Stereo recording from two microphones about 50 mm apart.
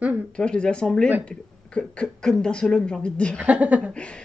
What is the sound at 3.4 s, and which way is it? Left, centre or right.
Speech, right.